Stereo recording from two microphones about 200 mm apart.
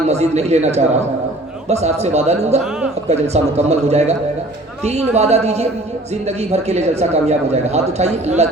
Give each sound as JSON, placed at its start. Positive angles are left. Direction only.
{"t": 0.1, "sound": "a man's voice", "side_deg": -35}